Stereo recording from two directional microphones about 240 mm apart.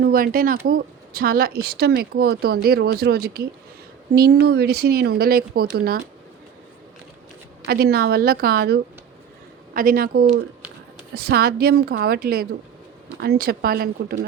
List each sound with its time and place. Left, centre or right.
0.0 s speech: right
7.7 s speech: right